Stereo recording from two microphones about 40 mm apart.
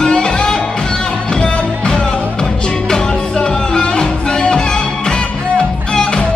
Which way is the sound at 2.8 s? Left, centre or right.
Centre.